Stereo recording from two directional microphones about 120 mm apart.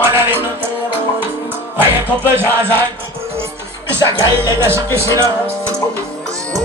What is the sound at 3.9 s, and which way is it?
Speech, 20° right (ahead or behind).